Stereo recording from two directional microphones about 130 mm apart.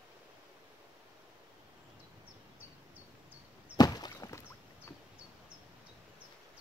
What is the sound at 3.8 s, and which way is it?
Walk, 30° left (ahead or behind).